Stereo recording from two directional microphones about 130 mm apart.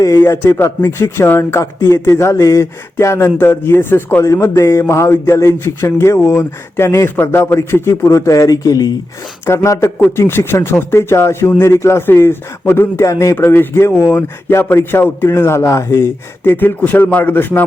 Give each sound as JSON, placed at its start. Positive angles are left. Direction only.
{"t": 0.0, "sound": "speech", "side_deg": 20}